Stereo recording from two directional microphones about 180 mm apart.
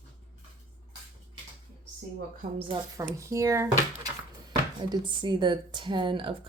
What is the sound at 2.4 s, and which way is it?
Speech, 30° right (ahead or behind).